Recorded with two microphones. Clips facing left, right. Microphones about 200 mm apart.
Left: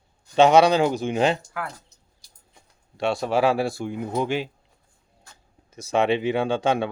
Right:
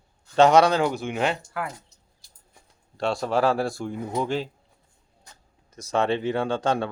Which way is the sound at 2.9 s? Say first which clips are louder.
Left 1 dB; 5° left (ahead or behind).